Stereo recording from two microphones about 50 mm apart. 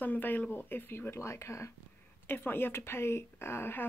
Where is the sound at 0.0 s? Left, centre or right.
Left.